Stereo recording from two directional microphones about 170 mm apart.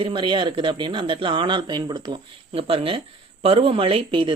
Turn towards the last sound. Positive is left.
turn(degrees=-30)  # may be behind; listen again after turning